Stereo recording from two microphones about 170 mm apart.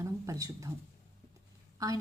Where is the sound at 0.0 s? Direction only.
20° right (ahead or behind).